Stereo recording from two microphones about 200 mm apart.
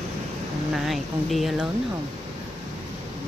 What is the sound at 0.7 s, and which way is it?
Speech, centre (ahead or behind).